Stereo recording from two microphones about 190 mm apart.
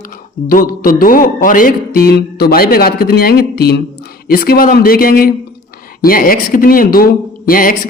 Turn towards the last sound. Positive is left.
turn(degrees=50)  # may be behind; listen again after turning